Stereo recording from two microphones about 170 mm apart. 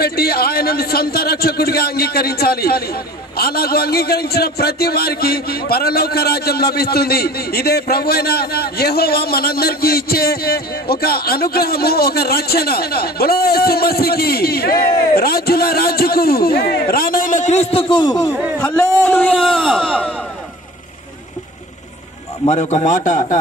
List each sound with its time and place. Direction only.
0.0 s a man's voice: 65° left (ahead or behind); by 18.3 s 25° left (ahead or behind)
18.6 s a man's voice: 10° left (ahead or behind)
22.5 s a man's voice: 40° left (ahead or behind)